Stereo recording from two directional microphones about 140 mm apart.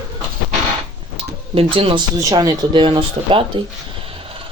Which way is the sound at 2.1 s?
25° right (ahead or behind).